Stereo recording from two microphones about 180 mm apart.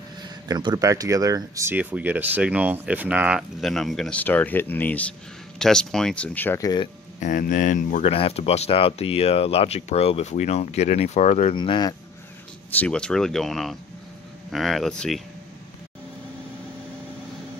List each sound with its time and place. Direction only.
0.2 s speech: 25° right (ahead or behind); by 6.7 s 10° left (ahead or behind)
7.2 s speech: 45° left (ahead or behind)
11.5 s speech: 25° left (ahead or behind)
12.7 s speech: 5° left (ahead or behind)